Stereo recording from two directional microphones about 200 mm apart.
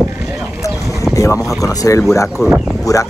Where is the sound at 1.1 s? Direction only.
15° left (ahead or behind).